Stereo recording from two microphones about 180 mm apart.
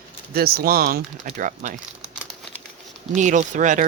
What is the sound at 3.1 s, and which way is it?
Speech, 40° right (ahead or behind).